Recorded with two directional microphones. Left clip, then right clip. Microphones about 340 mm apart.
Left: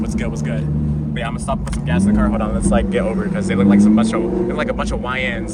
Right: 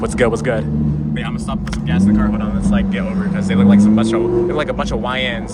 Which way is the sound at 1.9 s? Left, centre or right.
Centre.